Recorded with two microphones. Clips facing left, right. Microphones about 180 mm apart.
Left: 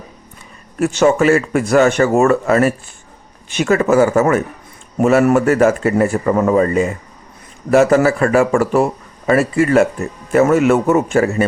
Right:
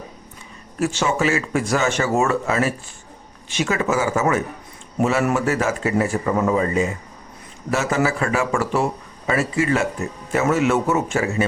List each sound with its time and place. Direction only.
0.8 s speech: 60° left (ahead or behind)